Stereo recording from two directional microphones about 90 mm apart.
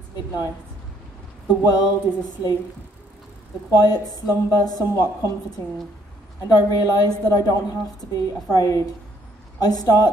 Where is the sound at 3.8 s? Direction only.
45° left (ahead or behind).